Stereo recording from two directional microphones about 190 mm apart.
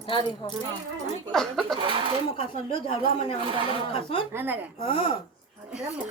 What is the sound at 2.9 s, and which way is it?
Speech, 30° left (ahead or behind).